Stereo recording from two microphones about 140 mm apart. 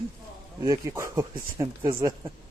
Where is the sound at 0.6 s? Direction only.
25° right (ahead or behind).